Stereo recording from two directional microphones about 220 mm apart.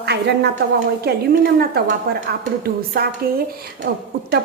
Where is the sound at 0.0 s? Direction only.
50° right (ahead or behind).